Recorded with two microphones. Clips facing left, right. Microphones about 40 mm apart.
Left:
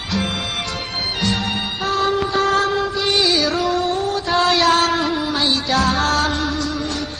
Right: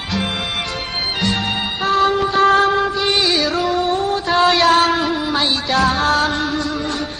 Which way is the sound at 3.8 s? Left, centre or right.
Right.